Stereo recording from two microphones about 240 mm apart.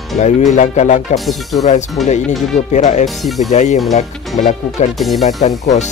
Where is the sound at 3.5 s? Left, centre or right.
Left.